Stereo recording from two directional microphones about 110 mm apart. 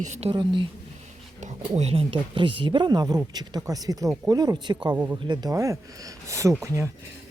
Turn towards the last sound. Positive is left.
turn(degrees=-30)  # may be behind; listen again after turning